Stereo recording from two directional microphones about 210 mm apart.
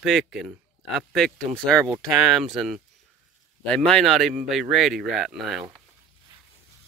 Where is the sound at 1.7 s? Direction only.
15° right (ahead or behind).